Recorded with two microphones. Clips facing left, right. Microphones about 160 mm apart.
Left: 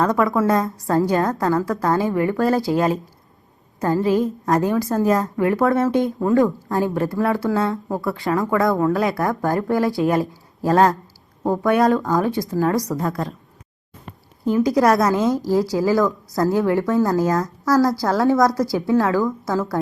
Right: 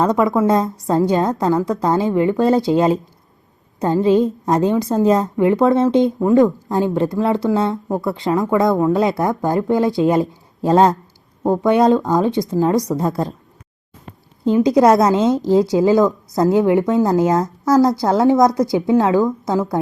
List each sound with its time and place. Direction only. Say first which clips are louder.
0.0 s a woman's voice: right 3 dB; 20° right (ahead or behind)
14.4 s a woman's voice: right 4 dB; 20° right (ahead or behind)